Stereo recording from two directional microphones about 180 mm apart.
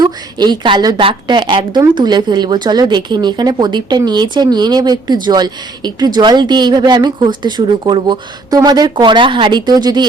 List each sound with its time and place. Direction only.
0.0 s a woman's voice: 25° right (ahead or behind)